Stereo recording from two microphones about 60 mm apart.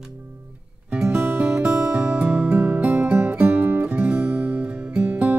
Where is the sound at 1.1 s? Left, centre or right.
Right.